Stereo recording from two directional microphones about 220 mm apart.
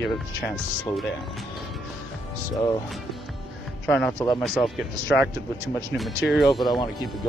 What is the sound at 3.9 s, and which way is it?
Speech, 5° left (ahead or behind).